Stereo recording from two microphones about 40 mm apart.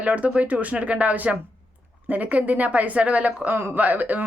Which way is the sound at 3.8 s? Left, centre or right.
Right.